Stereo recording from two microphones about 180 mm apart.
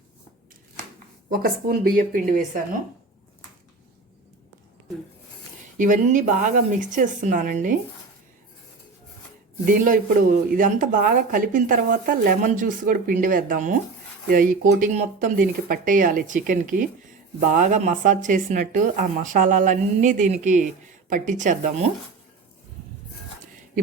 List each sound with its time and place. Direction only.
1.3 s a woman's voice: 55° right (ahead or behind)
5.7 s a woman's voice: 45° right (ahead or behind)
9.6 s a woman's voice: 50° right (ahead or behind)